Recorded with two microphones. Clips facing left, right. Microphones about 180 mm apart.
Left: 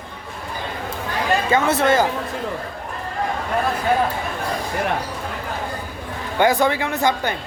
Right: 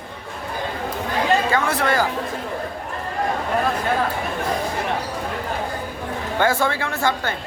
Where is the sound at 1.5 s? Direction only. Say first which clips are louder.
Left 3 dB; 25° left (ahead or behind).